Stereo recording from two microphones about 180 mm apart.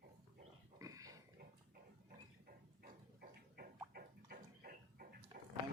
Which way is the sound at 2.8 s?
55° right (ahead or behind).